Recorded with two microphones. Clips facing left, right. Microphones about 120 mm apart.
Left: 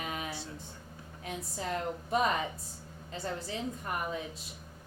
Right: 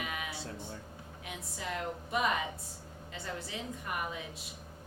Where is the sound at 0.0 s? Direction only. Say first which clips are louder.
Left 2 dB; 35° left (ahead or behind).